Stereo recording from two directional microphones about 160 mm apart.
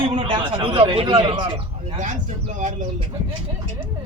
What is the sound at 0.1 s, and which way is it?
Speech, 35° right (ahead or behind).